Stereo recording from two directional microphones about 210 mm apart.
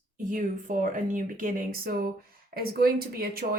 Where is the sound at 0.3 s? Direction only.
40° right (ahead or behind).